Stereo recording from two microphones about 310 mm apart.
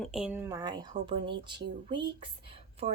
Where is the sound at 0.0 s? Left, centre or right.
Centre.